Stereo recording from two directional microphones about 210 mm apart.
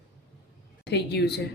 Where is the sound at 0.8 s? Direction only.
55° left (ahead or behind).